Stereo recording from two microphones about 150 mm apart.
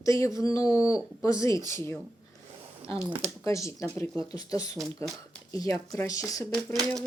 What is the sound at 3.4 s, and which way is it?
Speech, 20° left (ahead or behind).